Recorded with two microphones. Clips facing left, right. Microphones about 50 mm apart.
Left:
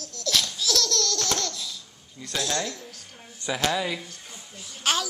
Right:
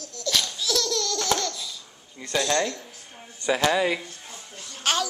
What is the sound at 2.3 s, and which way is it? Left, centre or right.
A man's voice, centre.